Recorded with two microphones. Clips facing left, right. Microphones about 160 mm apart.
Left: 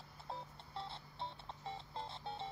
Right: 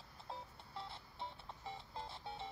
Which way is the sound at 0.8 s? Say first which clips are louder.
Left 2 dB; 25° left (ahead or behind).